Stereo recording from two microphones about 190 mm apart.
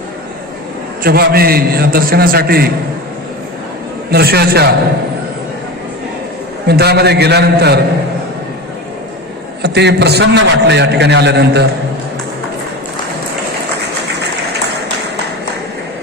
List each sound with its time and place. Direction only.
1.0 s a man's voice: 55° right (ahead or behind)
4.1 s a man's voice: 55° right (ahead or behind)
6.7 s a man's voice: 60° right (ahead or behind)
9.6 s a man's voice: 60° right (ahead or behind)